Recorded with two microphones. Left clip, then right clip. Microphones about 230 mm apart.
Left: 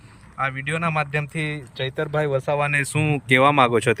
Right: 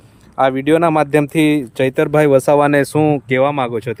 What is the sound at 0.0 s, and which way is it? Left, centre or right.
Speech, right.